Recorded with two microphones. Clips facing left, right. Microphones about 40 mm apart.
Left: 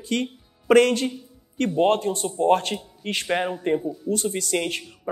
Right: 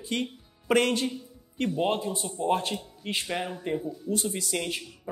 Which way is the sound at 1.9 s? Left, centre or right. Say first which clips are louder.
Left 7 dB; centre.